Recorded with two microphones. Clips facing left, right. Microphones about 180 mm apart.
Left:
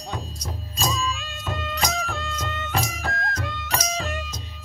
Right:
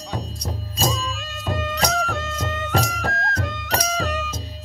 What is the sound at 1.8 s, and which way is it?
Music, 70° right (ahead or behind).